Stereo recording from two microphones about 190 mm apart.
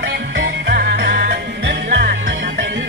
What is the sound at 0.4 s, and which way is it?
Music, 60° right (ahead or behind).